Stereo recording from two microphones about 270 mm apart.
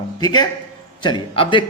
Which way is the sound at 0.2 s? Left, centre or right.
Centre.